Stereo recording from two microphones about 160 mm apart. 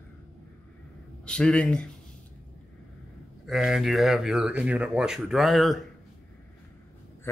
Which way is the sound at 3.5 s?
Centre (ahead or behind).